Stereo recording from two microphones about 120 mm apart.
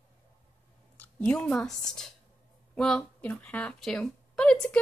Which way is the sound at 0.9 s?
15° left (ahead or behind).